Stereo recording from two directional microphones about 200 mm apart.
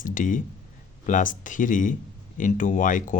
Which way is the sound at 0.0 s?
40° left (ahead or behind).